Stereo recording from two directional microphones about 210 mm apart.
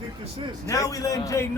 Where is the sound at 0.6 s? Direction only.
15° left (ahead or behind).